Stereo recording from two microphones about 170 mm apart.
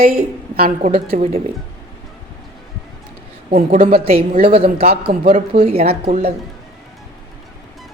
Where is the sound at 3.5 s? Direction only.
50° right (ahead or behind).